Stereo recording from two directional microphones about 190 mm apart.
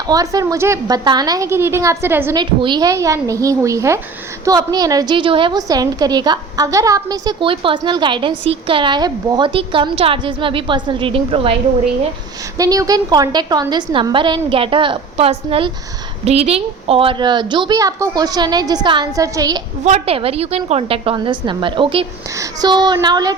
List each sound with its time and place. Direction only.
0.1 s a woman's voice: 20° right (ahead or behind)
2.4 s a woman's voice: 25° right (ahead or behind)
12.5 s a woman's voice: 20° right (ahead or behind)
19.8 s a woman's voice: 35° right (ahead or behind)